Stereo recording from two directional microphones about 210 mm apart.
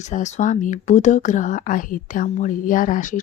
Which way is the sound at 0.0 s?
35° left (ahead or behind).